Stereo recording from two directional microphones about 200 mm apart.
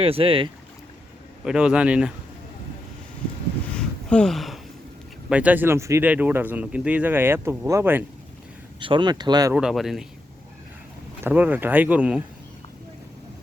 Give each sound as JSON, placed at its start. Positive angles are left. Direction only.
{"t": 0.0, "sound": "speech", "side_deg": -30}
{"t": 1.5, "sound": "a man's voice", "side_deg": -5}
{"t": 3.8, "sound": "a sound", "side_deg": 5}
{"t": 5.3, "sound": "speech", "side_deg": -5}
{"t": 8.8, "sound": "speech", "side_deg": -25}
{"t": 9.6, "sound": "a man's voice", "side_deg": 0}
{"t": 11.2, "sound": "speech", "side_deg": -10}